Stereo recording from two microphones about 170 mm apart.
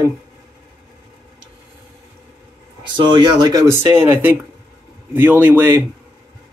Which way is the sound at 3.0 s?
30° right (ahead or behind).